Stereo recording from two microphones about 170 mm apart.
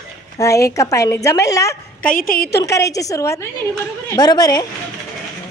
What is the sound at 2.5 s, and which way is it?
A woman's voice, 20° left (ahead or behind).